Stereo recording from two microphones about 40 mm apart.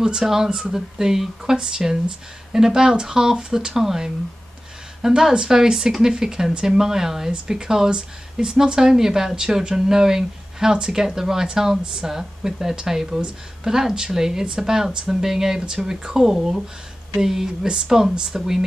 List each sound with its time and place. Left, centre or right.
0.2 s speech: centre
16.3 s speech: centre